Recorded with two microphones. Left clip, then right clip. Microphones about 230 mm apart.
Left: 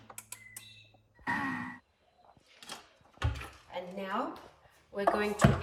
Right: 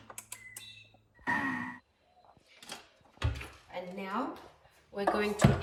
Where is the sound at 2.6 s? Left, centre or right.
Centre.